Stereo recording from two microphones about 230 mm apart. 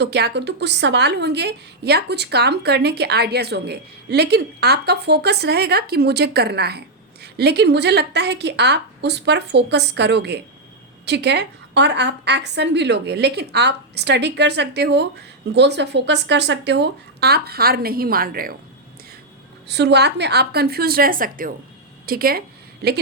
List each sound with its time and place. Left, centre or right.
0.0 s a woman's voice: right
19.6 s a woman's voice: right